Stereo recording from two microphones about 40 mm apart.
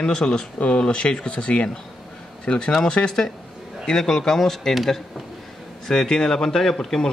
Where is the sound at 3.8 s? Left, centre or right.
Centre.